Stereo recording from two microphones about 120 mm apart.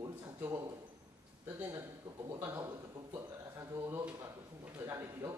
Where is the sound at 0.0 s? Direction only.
30° right (ahead or behind).